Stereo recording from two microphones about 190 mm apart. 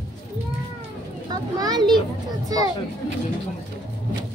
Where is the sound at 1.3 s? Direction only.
20° right (ahead or behind).